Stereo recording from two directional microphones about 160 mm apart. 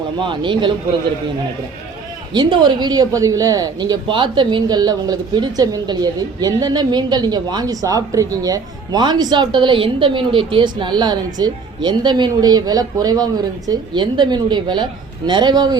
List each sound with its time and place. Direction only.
0.2 s speech: 30° right (ahead or behind)
2.3 s speech: 30° right (ahead or behind)